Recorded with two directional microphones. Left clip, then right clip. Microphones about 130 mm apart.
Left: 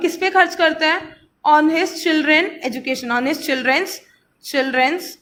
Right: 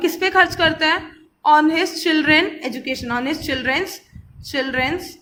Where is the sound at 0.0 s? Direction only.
10° left (ahead or behind); by 5.0 s 25° left (ahead or behind).